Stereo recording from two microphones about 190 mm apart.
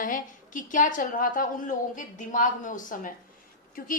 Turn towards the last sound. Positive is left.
turn(degrees=45)  # may be behind; listen again after turning